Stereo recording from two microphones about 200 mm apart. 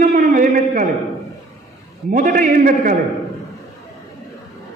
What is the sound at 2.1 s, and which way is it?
Speech, 40° right (ahead or behind).